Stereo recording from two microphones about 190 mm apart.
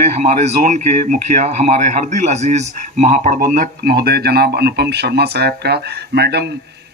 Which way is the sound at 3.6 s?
50° right (ahead or behind).